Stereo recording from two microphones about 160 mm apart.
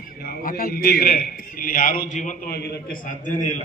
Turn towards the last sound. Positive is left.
turn(degrees=50)  # may be behind; listen again after turning